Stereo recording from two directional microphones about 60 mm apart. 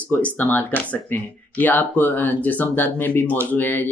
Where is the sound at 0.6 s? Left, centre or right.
Left.